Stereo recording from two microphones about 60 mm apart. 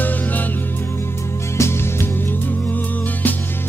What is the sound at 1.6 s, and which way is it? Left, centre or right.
Music, left.